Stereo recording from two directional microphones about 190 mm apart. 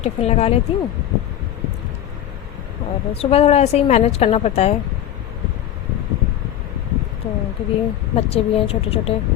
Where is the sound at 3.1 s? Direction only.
30° left (ahead or behind).